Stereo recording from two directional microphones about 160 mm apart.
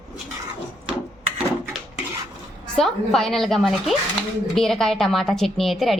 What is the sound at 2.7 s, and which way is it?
A woman's voice, centre (ahead or behind).